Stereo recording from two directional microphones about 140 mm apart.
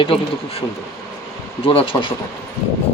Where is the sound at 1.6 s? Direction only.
40° left (ahead or behind).